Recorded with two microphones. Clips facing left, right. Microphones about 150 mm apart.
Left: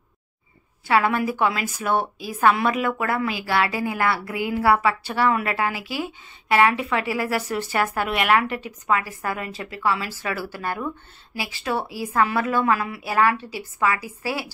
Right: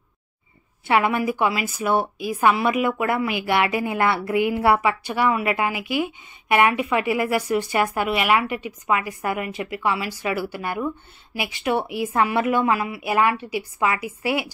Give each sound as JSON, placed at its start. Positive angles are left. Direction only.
{"t": 0.8, "sound": "a woman's voice", "side_deg": -20}